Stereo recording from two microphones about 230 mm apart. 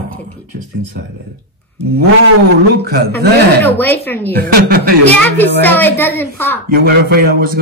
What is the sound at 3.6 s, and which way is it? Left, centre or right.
Speech, centre.